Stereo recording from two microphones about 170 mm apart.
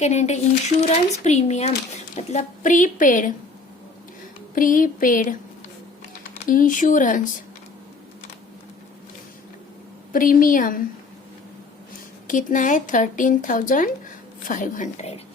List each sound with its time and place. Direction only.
0.0 s speech: 40° left (ahead or behind)
4.5 s speech: 50° left (ahead or behind)
6.4 s speech: 50° left (ahead or behind)
10.1 s speech: 55° left (ahead or behind)
12.3 s speech: 50° left (ahead or behind)